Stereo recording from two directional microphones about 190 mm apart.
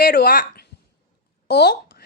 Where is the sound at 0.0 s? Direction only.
50° left (ahead or behind).